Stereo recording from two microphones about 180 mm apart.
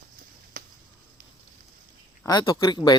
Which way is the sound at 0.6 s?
50° right (ahead or behind).